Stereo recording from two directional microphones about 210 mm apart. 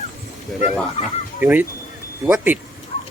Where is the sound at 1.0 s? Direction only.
30° left (ahead or behind).